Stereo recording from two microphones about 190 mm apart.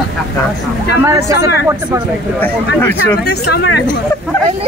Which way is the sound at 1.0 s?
15° right (ahead or behind).